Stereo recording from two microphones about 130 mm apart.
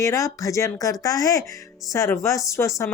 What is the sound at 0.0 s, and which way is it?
Speech, 25° left (ahead or behind).